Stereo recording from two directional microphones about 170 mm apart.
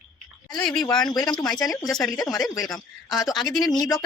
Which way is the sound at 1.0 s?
20° left (ahead or behind).